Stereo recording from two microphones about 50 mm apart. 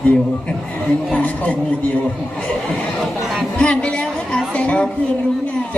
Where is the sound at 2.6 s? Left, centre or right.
Centre.